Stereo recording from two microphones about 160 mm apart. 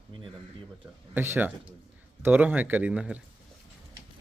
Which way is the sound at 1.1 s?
15° right (ahead or behind).